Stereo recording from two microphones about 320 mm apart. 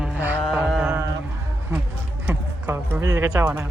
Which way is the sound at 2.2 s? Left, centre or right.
Centre.